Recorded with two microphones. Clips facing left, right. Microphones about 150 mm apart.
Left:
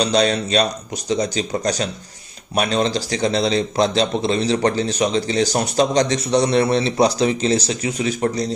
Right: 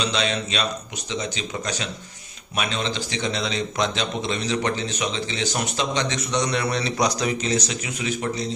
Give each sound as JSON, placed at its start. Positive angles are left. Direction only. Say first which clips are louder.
{"t": 0.0, "sound": "a man's voice", "louder": "left 7 dB", "side_deg": 40}